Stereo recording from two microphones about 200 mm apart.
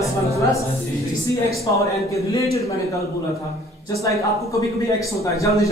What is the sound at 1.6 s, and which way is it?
Speech, 15° left (ahead or behind).